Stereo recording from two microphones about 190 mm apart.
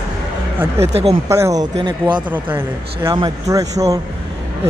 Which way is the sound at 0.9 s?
30° right (ahead or behind).